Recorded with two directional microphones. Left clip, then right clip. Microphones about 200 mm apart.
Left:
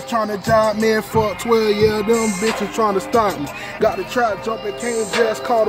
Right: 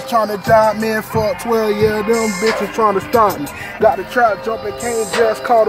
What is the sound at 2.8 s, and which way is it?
Music, 10° left (ahead or behind).